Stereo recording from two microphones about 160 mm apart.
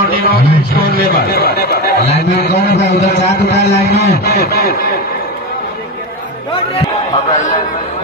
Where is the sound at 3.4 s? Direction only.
85° left.